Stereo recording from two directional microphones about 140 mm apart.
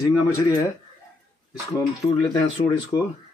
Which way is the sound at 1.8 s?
30° left (ahead or behind).